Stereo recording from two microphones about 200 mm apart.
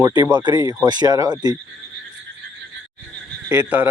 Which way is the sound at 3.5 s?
10° right (ahead or behind).